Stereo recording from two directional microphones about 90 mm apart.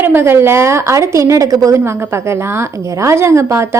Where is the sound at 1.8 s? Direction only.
25° right (ahead or behind).